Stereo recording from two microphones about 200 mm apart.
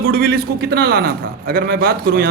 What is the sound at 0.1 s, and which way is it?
A man's voice, 50° right (ahead or behind).